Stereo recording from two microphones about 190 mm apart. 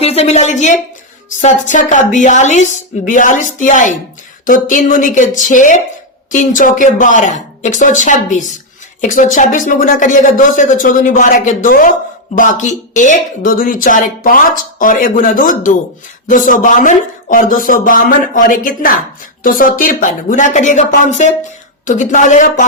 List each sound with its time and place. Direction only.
0.0 s a woman's voice: 35° left (ahead or behind)